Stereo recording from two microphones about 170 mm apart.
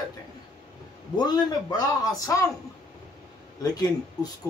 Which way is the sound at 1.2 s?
25° left (ahead or behind).